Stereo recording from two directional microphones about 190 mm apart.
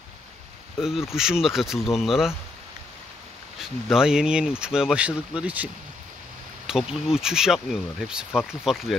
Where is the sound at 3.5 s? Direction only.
Centre (ahead or behind).